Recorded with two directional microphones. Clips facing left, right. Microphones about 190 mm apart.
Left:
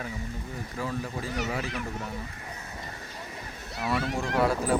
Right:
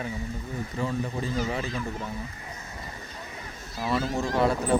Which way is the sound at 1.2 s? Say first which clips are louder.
Right 3 dB; 70° left (ahead or behind).